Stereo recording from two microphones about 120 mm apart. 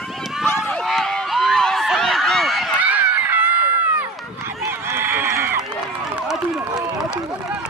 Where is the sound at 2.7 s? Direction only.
10° right (ahead or behind).